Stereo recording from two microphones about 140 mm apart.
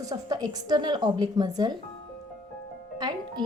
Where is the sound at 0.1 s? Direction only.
30° right (ahead or behind).